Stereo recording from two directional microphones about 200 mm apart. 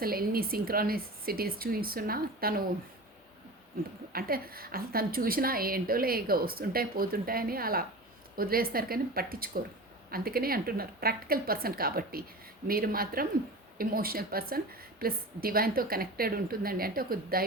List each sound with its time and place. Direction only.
0.0 s a woman's voice: 50° right (ahead or behind)
4.1 s a woman's voice: 50° right (ahead or behind)